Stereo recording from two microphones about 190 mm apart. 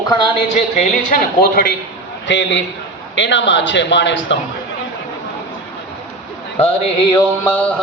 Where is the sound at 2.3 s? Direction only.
70° left (ahead or behind).